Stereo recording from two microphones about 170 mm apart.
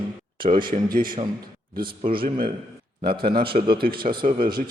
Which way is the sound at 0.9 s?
55° right (ahead or behind).